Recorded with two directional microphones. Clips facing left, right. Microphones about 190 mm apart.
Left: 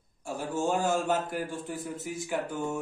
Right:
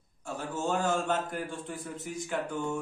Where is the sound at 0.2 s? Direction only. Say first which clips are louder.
Left 3 dB; 10° left (ahead or behind).